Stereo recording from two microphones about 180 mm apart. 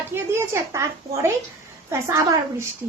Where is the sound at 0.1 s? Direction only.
15° right (ahead or behind).